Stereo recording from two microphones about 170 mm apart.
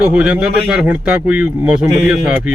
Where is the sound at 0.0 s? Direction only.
10° right (ahead or behind).